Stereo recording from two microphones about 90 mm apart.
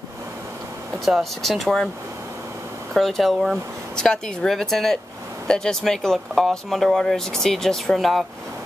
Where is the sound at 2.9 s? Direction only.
5° left (ahead or behind).